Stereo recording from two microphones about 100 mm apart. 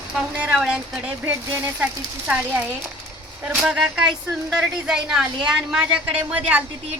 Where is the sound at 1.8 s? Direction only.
15° right (ahead or behind).